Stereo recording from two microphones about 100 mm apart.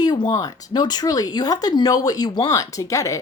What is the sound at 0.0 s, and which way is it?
A woman's voice, 45° left (ahead or behind).